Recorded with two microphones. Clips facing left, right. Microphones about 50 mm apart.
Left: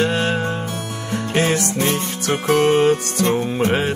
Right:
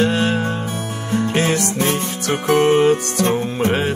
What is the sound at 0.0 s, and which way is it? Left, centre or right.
Music, centre.